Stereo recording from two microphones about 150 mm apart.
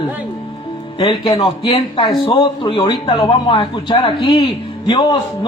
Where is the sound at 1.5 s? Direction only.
40° left (ahead or behind).